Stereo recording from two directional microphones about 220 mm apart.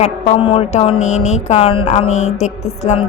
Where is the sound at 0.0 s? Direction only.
25° left (ahead or behind).